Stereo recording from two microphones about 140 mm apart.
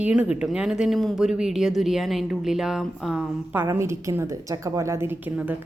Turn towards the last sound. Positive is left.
turn(degrees=-10)  # may be behind; listen again after turning